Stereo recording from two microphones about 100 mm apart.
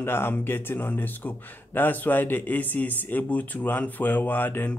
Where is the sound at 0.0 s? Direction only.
20° left (ahead or behind).